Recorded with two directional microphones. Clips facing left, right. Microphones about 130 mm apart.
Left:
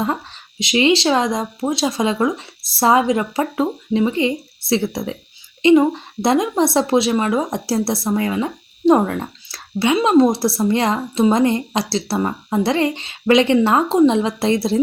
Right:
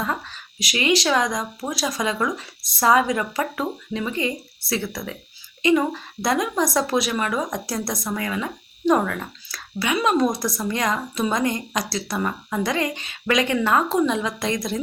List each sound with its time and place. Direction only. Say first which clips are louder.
0.6 s a woman's voice: left 6 dB; 25° left (ahead or behind)